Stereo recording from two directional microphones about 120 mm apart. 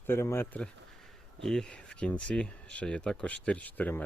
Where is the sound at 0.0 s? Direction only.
20° left (ahead or behind).